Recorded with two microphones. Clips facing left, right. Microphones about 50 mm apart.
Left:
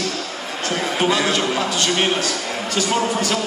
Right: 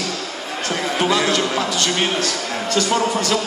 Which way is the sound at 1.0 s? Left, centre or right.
Centre.